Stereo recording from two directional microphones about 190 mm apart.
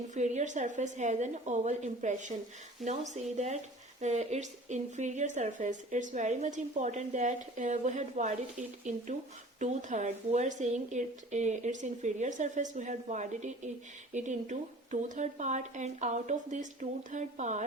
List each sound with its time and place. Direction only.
0.1 s speech: 40° right (ahead or behind)